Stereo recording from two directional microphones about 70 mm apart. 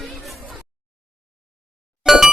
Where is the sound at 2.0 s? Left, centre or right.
Centre.